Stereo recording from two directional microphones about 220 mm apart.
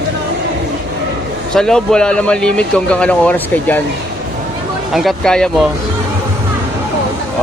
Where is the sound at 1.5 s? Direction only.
5° left (ahead or behind).